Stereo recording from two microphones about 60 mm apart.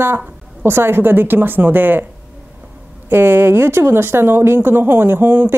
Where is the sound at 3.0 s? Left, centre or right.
Right.